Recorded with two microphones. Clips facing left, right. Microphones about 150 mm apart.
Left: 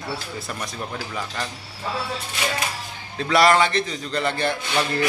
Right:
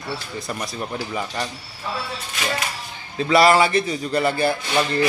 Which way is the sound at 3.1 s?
5° right (ahead or behind).